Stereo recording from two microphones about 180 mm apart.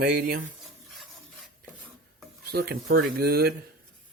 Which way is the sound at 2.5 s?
55° right (ahead or behind).